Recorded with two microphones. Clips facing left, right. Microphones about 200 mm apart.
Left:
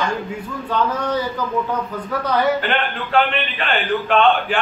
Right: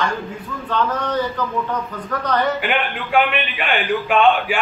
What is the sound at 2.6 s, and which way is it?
A man's voice, 15° right (ahead or behind).